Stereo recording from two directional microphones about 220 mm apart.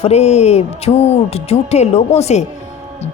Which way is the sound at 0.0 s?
30° left (ahead or behind).